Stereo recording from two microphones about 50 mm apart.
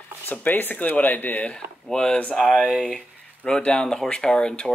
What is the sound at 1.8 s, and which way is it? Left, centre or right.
Speech, centre.